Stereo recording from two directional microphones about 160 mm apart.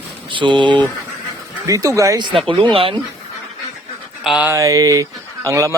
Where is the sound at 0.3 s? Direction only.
30° right (ahead or behind).